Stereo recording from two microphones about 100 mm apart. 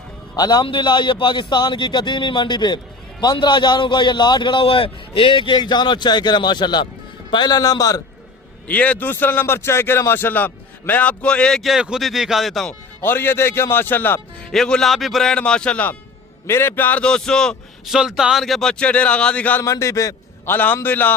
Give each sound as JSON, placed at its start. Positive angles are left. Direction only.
{"t": 0.3, "sound": "a man's voice", "side_deg": 45}
{"t": 8.6, "sound": "a man's voice", "side_deg": 15}
{"t": 13.0, "sound": "a man's voice", "side_deg": 20}
{"t": 14.5, "sound": "a man's voice", "side_deg": 5}
{"t": 17.8, "sound": "a man's voice", "side_deg": -5}
{"t": 19.6, "sound": "a man's voice", "side_deg": 30}